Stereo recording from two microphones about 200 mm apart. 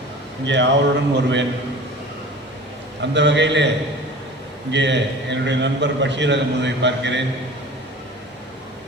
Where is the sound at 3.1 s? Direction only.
60° right (ahead or behind).